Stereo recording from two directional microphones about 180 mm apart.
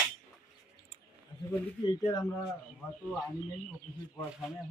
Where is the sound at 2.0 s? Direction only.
20° left (ahead or behind).